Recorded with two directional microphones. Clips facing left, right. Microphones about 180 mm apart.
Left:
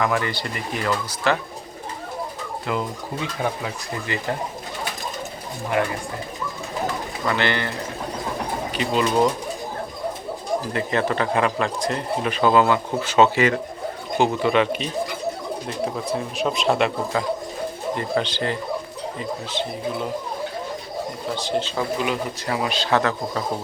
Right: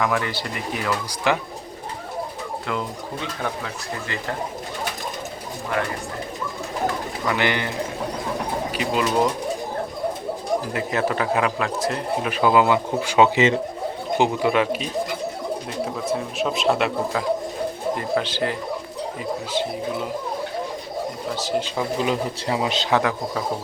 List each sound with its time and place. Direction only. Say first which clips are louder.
0.0 s speech: left 1 dB; centre (ahead or behind)
1.3 s speech: even; 15° right (ahead or behind)
7.3 s speech: even; 15° right (ahead or behind)
8.7 s speech: left 2 dB; 5° right (ahead or behind)
10.7 s speech: left 1 dB; 5° right (ahead or behind)
14.2 s speech: left 1 dB; 10° right (ahead or behind)
16.0 s speech: even; centre (ahead or behind)
21.3 s speech: even; 5° right (ahead or behind)
22.0 s speech: right 2 dB; 25° right (ahead or behind)